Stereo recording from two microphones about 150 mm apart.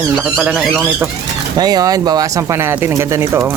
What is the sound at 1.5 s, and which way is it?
Speech, 25° right (ahead or behind).